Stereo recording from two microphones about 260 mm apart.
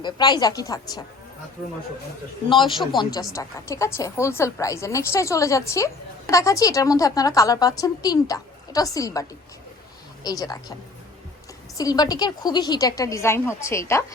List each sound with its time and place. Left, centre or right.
0.0 s a woman's voice: centre
2.5 s a man's voice: centre
10.2 s a woman's voice: centre
11.8 s a woman's voice: centre